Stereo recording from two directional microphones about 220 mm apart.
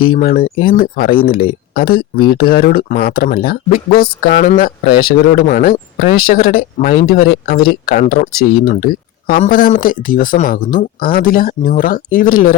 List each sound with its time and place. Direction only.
0.2 s speech: 40° left (ahead or behind)